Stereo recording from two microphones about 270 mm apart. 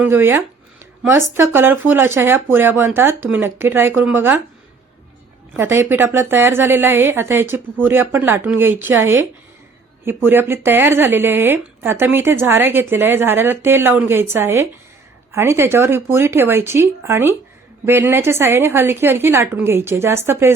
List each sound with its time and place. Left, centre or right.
0.0 s speech: centre
5.5 s speech: centre
9.0 s a woman's voice: right
10.0 s speech: centre